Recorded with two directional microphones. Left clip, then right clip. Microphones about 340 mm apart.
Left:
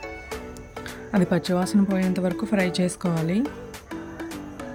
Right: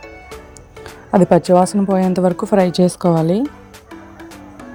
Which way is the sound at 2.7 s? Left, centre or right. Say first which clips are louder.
Right 10 dB; centre.